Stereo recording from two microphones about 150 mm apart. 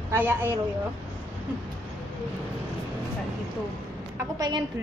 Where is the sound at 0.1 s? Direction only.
15° right (ahead or behind).